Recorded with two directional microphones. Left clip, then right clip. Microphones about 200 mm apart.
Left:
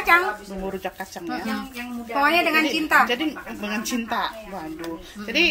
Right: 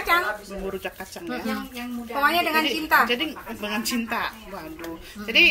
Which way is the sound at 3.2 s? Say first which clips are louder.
Left 1 dB; 20° left (ahead or behind).